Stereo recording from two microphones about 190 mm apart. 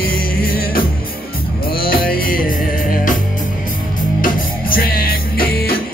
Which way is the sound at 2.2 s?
50° left (ahead or behind).